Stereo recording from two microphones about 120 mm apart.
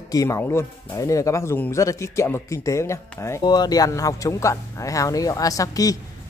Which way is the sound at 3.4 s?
35° left (ahead or behind).